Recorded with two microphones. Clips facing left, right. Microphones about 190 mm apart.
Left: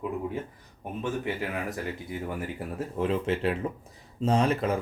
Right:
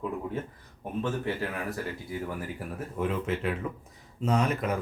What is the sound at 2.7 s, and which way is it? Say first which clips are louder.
Speech: left 3 dB; 30° left (ahead or behind).